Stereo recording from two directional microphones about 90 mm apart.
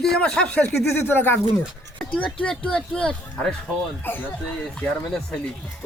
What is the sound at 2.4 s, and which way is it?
Speech, 10° left (ahead or behind).